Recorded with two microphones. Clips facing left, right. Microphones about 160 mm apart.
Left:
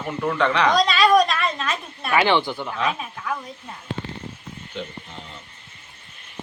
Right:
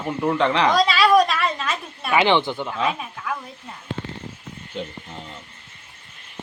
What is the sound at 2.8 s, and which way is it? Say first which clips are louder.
Speech: even; 5° right (ahead or behind).